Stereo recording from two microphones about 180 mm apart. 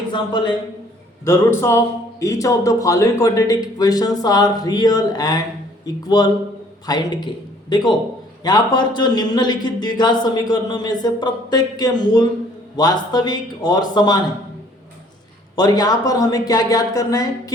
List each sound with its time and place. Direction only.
0.1 s a man's voice: 25° left (ahead or behind)
1.2 s a man's voice: 15° left (ahead or behind)
15.5 s a man's voice: 20° left (ahead or behind)